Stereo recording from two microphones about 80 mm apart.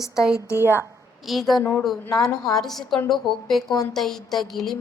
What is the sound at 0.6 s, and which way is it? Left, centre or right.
Speech, right.